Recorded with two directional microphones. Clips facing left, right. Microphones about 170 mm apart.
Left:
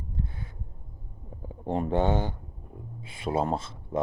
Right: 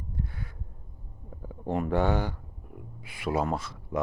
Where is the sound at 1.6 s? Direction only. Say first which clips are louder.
Left 1 dB; 25° left (ahead or behind).